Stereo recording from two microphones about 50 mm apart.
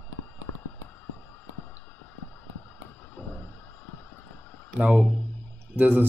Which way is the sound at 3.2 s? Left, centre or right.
Left.